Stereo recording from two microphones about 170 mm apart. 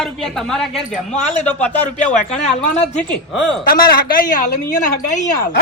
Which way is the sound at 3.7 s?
60° left (ahead or behind).